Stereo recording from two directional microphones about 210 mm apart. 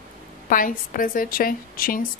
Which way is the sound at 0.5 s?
40° left (ahead or behind).